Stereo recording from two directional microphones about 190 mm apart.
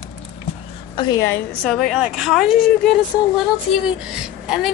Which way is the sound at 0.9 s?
20° left (ahead or behind).